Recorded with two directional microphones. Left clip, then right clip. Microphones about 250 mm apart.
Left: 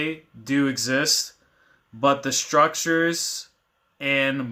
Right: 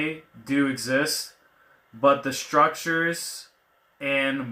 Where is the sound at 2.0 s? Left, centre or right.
Left.